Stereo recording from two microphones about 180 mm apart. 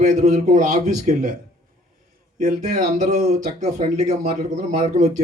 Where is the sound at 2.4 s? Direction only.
40° right (ahead or behind).